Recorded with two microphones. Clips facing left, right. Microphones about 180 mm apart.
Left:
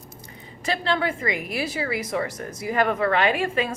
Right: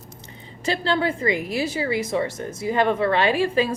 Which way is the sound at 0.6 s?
30° right (ahead or behind).